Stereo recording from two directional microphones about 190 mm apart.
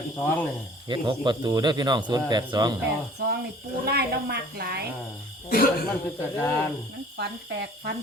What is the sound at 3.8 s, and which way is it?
A woman's voice, 55° right (ahead or behind).